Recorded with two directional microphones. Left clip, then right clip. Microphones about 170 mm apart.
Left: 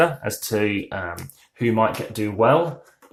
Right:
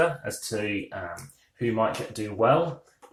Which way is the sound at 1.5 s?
55° left (ahead or behind).